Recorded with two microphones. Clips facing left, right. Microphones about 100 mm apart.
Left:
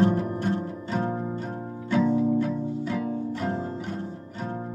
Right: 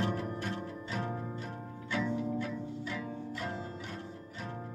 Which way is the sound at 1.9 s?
40° left (ahead or behind).